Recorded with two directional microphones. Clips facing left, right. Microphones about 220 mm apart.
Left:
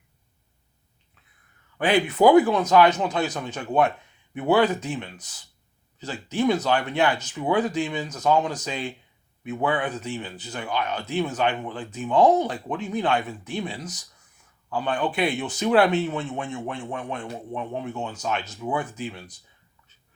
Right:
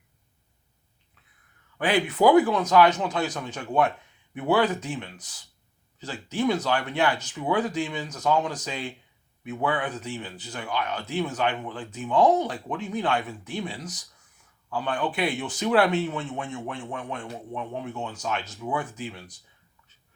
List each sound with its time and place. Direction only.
1.8 s speech: 25° left (ahead or behind)